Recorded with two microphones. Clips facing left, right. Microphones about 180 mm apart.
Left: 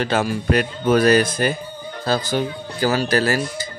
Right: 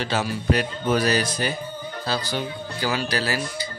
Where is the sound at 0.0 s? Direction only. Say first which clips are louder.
Left 5 dB; 50° left (ahead or behind).